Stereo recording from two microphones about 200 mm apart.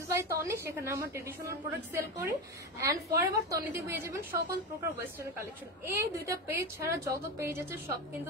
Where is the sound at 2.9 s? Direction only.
15° right (ahead or behind).